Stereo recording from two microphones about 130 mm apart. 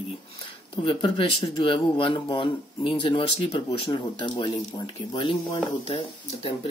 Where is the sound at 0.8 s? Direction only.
40° left (ahead or behind).